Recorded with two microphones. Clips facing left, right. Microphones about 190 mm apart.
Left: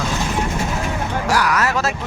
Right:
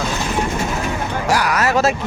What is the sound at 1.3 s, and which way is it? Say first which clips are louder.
Speech: right 2 dB; 25° right (ahead or behind).